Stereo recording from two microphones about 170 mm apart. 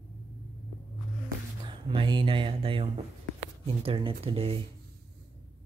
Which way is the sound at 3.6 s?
35° right (ahead or behind).